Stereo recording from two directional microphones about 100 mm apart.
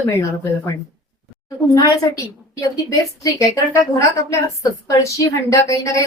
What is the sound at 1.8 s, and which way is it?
A woman's voice, 40° left (ahead or behind).